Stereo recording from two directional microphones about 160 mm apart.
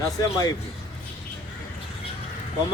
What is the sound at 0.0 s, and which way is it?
Speech, 20° left (ahead or behind).